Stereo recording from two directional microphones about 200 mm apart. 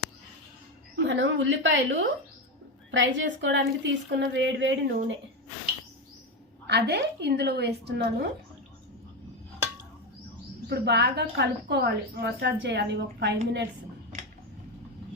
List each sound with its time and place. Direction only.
0.9 s a woman's voice: 65° right (ahead or behind)
6.7 s a woman's voice: 55° right (ahead or behind)
10.7 s a woman's voice: 55° right (ahead or behind)